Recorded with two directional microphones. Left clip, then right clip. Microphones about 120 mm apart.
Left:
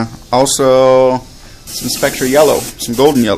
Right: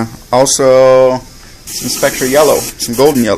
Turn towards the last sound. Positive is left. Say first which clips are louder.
# right 1 dB
turn(degrees=10)  # may be behind; listen again after turning